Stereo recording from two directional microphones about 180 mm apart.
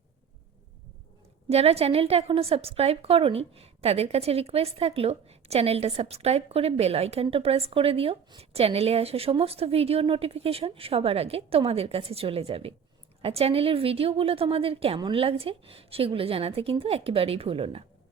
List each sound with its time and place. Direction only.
1.5 s a woman's voice: 35° right (ahead or behind)